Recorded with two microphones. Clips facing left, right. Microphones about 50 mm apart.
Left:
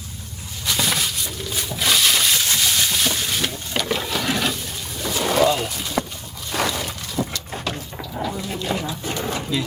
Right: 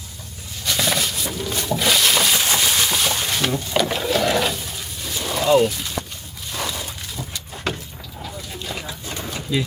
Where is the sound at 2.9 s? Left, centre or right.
Centre.